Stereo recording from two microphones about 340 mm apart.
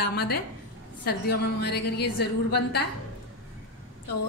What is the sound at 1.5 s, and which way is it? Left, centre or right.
A woman's voice, left.